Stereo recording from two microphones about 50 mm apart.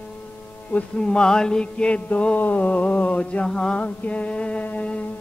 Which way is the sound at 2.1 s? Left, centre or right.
Left.